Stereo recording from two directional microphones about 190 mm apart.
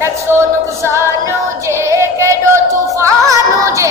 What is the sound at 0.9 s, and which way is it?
Music, 15° right (ahead or behind).